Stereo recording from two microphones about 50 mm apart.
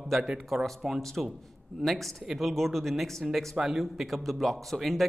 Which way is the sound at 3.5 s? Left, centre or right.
Centre.